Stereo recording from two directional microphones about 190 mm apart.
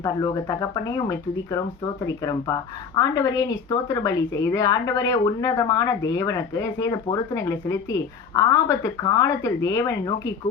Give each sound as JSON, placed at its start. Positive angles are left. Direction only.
{"t": 0.0, "sound": "speech", "side_deg": 20}